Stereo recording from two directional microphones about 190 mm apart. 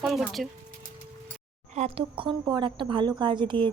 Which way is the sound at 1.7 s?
35° right (ahead or behind).